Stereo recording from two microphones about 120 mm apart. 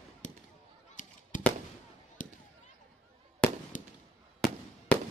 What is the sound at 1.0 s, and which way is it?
Honk, 90° left.